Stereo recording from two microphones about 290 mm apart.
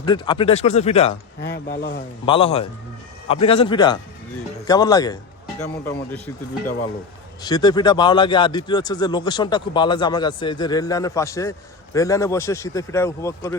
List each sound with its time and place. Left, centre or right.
0.0 s speech: centre
1.4 s speech: left
2.2 s speech: centre
7.4 s speech: centre